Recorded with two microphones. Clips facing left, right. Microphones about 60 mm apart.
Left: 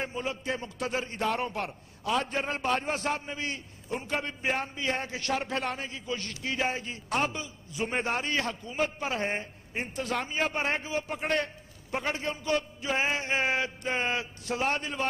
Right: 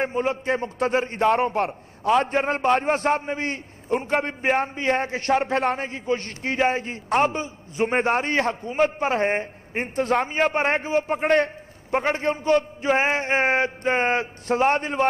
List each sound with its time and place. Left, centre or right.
0.0 s a man's voice: right
1.6 s a man's voice: right
11.2 s a man's voice: right
11.9 s a man's voice: right